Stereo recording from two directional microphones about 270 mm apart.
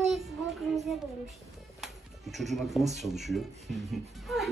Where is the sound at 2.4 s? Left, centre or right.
Centre.